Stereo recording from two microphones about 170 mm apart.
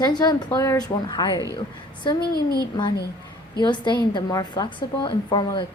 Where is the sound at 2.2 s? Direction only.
65° left (ahead or behind).